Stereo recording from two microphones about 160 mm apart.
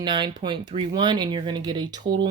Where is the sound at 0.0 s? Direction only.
30° right (ahead or behind).